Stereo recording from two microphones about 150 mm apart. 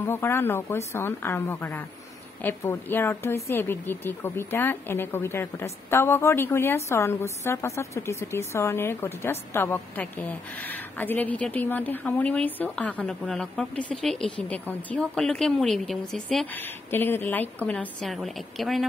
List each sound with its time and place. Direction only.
0.0 s a woman's voice: 15° left (ahead or behind)
16.5 s a woman's voice: 15° left (ahead or behind)